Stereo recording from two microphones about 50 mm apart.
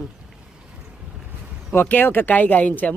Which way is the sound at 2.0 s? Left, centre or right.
Left.